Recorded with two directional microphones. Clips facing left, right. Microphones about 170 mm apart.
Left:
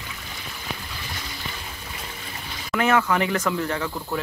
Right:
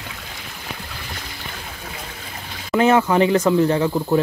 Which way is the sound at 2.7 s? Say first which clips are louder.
Right 6 dB; 25° right (ahead or behind).